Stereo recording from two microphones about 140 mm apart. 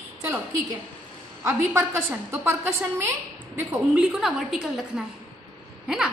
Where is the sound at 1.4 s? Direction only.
20° right (ahead or behind).